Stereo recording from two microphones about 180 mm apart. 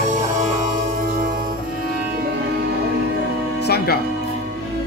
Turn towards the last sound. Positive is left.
turn(degrees=60)  # may be behind; listen again after turning